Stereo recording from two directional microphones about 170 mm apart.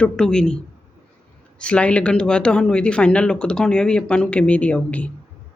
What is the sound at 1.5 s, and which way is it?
Speech, 5° left (ahead or behind).